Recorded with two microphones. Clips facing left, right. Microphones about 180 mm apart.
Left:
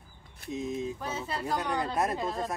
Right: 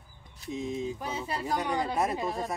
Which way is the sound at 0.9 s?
15° right (ahead or behind).